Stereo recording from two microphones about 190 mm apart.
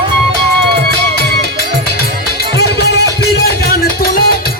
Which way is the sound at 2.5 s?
60° left (ahead or behind).